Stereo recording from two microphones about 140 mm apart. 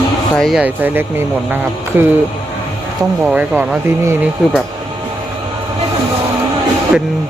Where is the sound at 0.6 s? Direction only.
15° right (ahead or behind).